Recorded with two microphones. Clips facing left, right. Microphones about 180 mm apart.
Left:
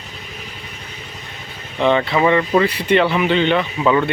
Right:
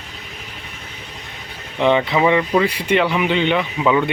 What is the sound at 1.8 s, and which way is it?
Speech, 15° right (ahead or behind).